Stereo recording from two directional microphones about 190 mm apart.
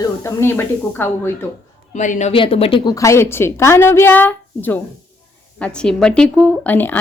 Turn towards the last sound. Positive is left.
turn(degrees=10)  # may be behind; listen again after turning